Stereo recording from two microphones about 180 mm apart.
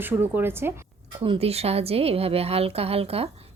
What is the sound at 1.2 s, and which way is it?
A woman's voice, 30° right (ahead or behind).